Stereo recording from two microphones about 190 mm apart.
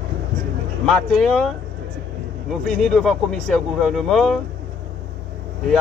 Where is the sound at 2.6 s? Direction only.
Centre (ahead or behind).